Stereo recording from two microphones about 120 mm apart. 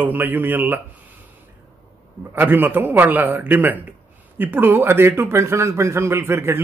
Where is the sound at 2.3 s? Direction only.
15° right (ahead or behind).